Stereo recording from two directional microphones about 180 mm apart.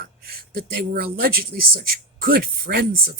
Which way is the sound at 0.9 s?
55° right (ahead or behind).